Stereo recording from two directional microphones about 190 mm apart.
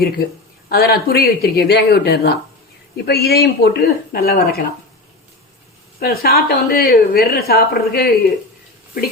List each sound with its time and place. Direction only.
0.7 s a woman's voice: 55° left (ahead or behind)
6.0 s a woman's voice: 55° left (ahead or behind)